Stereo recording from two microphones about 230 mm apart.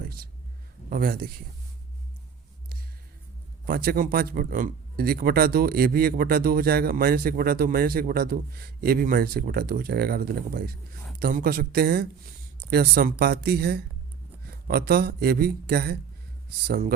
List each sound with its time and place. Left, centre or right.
0.0 s a sound: right
0.9 s speech: right
3.7 s speech: right